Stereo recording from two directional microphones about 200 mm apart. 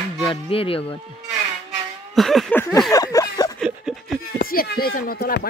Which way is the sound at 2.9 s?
15° left (ahead or behind).